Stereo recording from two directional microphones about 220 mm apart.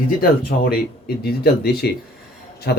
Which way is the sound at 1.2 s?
45° left (ahead or behind).